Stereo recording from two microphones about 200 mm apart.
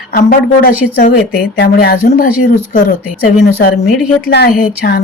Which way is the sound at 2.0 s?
45° left (ahead or behind).